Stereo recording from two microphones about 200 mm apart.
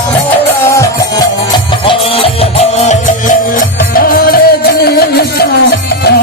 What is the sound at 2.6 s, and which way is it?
Music, 35° left (ahead or behind).